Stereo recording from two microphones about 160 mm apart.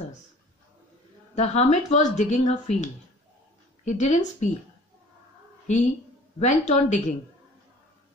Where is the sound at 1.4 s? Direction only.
50° left (ahead or behind).